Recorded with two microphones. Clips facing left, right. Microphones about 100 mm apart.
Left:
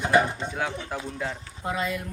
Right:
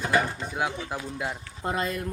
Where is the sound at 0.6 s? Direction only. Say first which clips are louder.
Right 3 dB; 15° right (ahead or behind).